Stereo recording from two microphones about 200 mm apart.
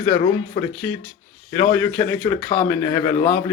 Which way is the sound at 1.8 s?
10° left (ahead or behind).